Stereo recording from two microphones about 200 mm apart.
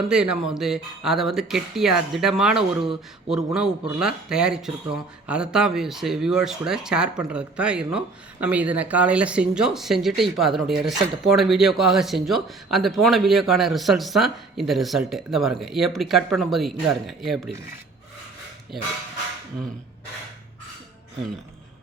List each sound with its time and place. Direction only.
0.1 s speech: 5° right (ahead or behind)